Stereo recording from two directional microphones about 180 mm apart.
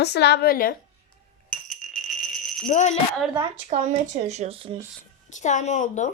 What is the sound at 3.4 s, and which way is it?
Speech, 30° right (ahead or behind).